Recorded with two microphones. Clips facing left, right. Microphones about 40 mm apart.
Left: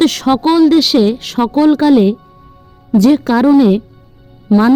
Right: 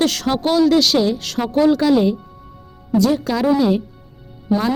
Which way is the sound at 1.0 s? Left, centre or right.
Left.